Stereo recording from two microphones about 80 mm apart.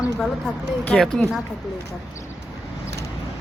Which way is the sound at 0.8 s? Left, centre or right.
Centre.